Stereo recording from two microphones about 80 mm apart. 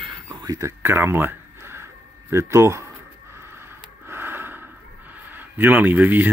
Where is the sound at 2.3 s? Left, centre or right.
Right.